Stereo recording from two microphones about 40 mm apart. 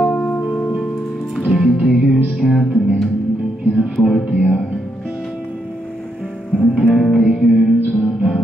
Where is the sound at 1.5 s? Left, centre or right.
Centre.